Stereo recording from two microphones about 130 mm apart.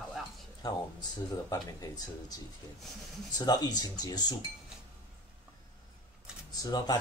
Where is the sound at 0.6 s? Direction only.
30° left (ahead or behind).